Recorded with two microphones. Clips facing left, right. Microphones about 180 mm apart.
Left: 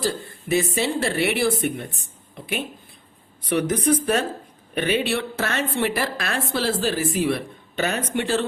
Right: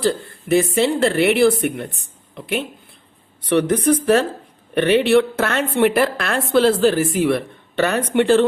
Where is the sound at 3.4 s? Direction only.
60° right (ahead or behind).